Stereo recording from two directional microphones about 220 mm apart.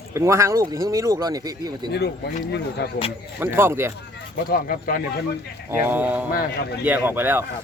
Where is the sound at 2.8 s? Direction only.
45° left (ahead or behind).